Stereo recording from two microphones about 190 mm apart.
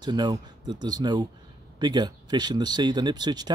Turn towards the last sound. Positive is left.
turn(degrees=-20)  # may be behind; listen again after turning